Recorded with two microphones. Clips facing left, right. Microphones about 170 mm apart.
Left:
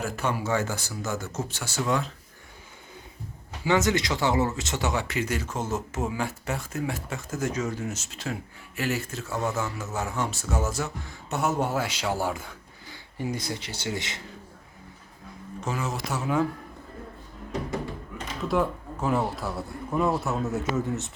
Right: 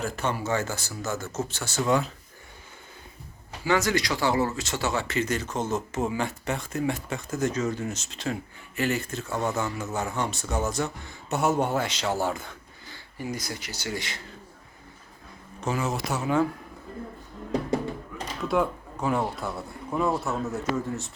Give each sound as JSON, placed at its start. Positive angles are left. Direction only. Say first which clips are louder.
{"t": 0.0, "sound": "speech", "louder": "even", "side_deg": 10}
{"t": 1.8, "sound": "speech", "louder": "right 3 dB", "side_deg": 0}
{"t": 3.6, "sound": "speech", "louder": "left 1 dB", "side_deg": 20}
{"t": 13.1, "sound": "speech", "louder": "left 2 dB", "side_deg": 25}
{"t": 15.7, "sound": "speech", "louder": "right 3 dB", "side_deg": 0}
{"t": 18.4, "sound": "speech", "louder": "even", "side_deg": 0}